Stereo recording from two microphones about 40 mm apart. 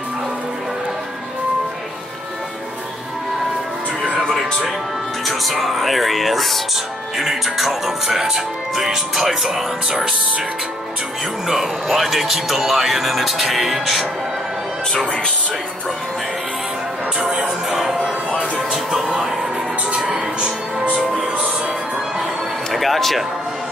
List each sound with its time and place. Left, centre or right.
5.2 s speech: centre
6.7 s speech: centre
11.4 s speech: centre
15.0 s speech: left
17.2 s music: centre
18.7 s speech: centre
20.2 s music: right
22.7 s speech: centre